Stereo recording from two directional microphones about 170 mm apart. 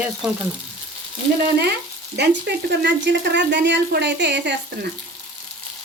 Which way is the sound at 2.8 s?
90° right.